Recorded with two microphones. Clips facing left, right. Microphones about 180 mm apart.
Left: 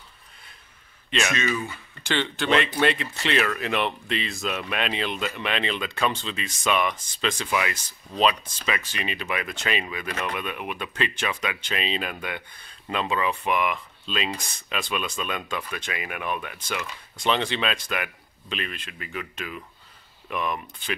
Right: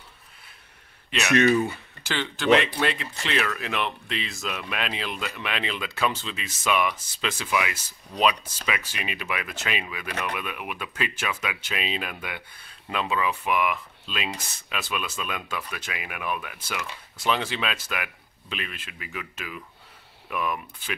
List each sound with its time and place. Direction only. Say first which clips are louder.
1.1 s speech: right 5 dB; 70° right (ahead or behind)
2.0 s speech: right 3 dB; 5° right (ahead or behind)